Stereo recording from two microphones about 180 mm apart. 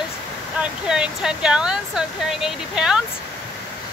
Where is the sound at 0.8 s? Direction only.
5° right (ahead or behind).